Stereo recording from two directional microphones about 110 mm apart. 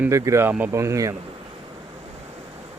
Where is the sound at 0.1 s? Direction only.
30° right (ahead or behind).